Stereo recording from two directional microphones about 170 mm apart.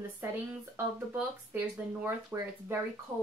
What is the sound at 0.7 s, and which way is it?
Speech, 10° right (ahead or behind).